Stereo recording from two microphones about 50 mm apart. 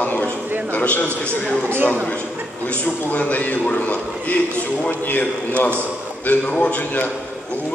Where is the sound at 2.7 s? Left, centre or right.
Left.